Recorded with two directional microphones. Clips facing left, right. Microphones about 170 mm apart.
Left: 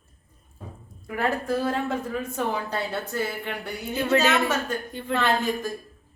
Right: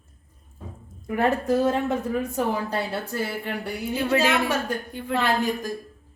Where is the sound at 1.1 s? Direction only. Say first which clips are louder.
Right 4 dB; 20° right (ahead or behind).